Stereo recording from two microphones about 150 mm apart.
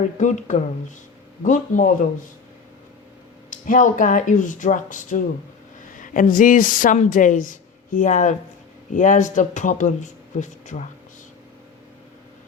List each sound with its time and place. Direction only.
0.2 s speech: 55° left (ahead or behind)
3.5 s speech: 60° left (ahead or behind)